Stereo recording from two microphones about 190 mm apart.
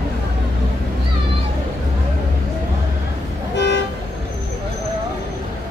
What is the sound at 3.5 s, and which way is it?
Toot, 65° left (ahead or behind).